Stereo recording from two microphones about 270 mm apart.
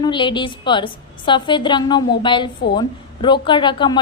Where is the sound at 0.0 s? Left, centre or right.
Centre.